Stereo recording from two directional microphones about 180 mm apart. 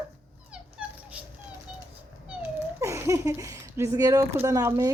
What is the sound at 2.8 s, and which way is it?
Speech, 15° right (ahead or behind).